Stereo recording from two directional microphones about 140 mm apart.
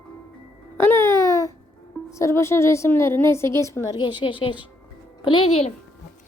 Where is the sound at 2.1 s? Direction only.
20° left (ahead or behind).